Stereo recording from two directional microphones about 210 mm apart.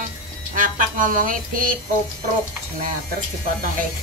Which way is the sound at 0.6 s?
40° right (ahead or behind).